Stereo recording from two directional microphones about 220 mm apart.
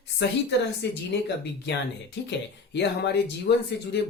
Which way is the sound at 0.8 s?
50° left (ahead or behind).